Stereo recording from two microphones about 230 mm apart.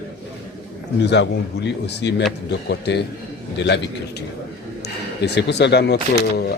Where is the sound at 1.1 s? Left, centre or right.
Left.